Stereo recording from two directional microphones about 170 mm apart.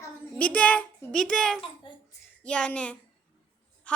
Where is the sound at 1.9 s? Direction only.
30° left (ahead or behind).